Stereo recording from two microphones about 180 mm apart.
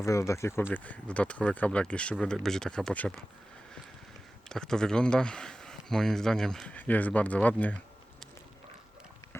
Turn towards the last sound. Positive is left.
turn(degrees=10)  # may be behind; listen again after turning